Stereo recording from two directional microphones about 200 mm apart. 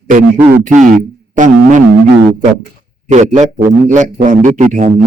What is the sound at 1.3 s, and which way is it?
Music, 40° right (ahead or behind).